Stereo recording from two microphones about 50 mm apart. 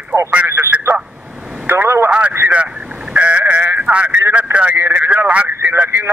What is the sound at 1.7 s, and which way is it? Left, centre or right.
Vehicle, right.